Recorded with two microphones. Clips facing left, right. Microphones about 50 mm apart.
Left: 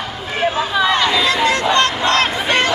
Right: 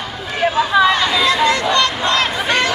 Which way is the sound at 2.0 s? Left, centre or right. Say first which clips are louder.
Left 1 dB; left.